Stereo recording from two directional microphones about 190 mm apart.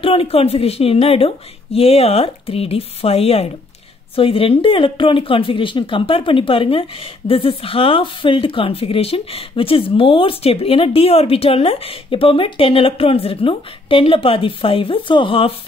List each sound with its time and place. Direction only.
0.0 s a woman's voice: 30° left (ahead or behind)